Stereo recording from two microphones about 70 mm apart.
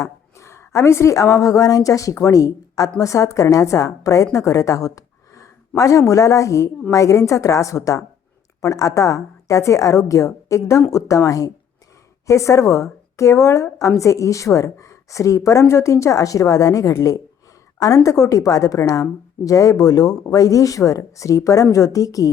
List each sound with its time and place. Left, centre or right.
0.0 s a woman's voice: left
12.2 s a woman's voice: left